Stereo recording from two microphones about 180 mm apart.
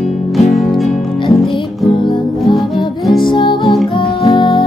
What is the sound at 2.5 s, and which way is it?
Music, centre (ahead or behind).